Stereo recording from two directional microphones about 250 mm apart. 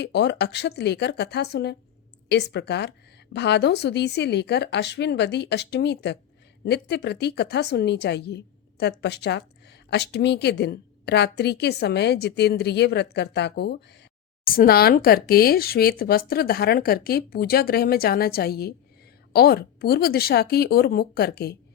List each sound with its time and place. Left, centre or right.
0.0 s a woman's voice: left